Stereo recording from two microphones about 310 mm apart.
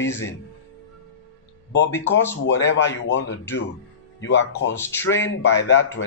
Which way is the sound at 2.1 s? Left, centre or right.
Left.